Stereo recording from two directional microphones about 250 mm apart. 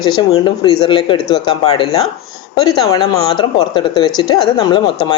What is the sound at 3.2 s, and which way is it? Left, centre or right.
Speech, centre.